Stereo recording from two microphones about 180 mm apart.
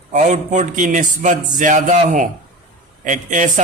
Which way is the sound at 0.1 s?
45° right (ahead or behind).